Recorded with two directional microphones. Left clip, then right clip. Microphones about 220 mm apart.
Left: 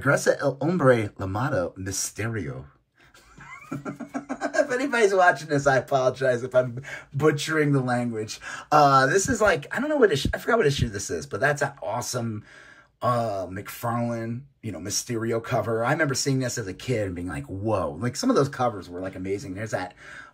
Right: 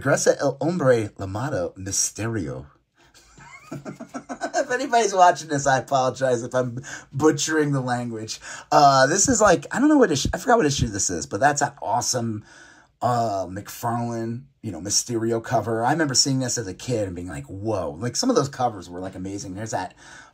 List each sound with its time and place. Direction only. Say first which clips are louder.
0.0 s speech: right 2 dB; 5° right (ahead or behind)
3.7 s speech: left 2 dB; centre (ahead or behind)